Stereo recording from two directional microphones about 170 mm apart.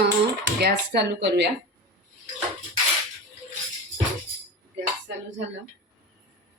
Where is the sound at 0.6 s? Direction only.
80° right.